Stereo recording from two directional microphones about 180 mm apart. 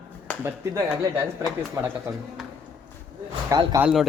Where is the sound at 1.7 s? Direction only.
15° right (ahead or behind).